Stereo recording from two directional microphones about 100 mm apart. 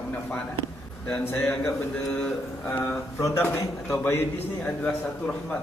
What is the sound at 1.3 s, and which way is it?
Speech, 25° left (ahead or behind).